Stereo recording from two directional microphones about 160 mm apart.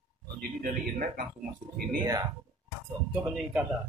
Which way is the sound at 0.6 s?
60° right (ahead or behind).